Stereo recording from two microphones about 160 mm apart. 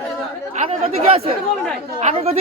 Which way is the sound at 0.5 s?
40° right (ahead or behind).